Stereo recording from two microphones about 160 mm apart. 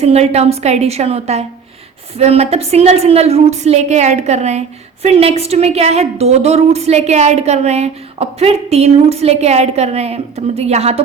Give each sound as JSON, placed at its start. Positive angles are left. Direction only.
{"t": 0.0, "sound": "a woman's voice", "side_deg": -40}